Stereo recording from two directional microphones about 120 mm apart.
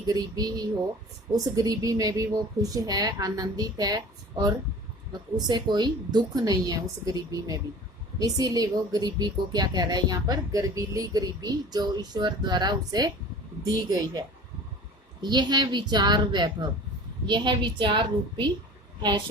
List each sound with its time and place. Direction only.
0.1 s a woman's voice: 35° right (ahead or behind)